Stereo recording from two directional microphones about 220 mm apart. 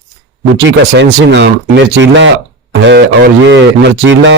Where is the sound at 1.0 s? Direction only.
50° right (ahead or behind).